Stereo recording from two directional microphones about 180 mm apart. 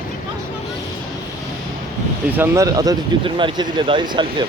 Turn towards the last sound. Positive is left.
turn(degrees=-25)  # may be behind; listen again after turning